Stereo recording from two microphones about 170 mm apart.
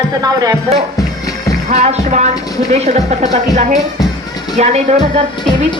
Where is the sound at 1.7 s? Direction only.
40° right (ahead or behind).